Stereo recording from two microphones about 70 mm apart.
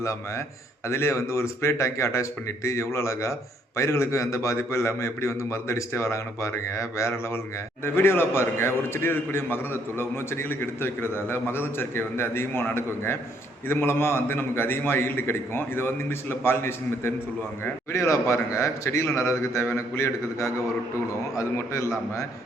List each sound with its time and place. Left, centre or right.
0.0 s a man's voice: left
17.9 s a man's voice: left